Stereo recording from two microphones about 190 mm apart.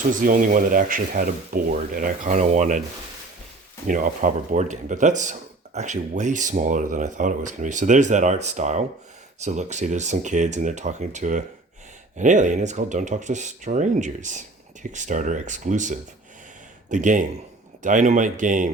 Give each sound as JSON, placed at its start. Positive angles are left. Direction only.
{"t": 0.3, "sound": "speech", "side_deg": -45}
{"t": 3.8, "sound": "speech", "side_deg": -45}